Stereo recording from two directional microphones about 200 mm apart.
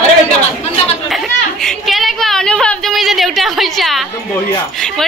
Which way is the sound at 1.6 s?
Centre (ahead or behind).